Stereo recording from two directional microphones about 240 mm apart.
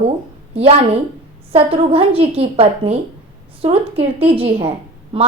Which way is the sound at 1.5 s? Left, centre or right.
Right.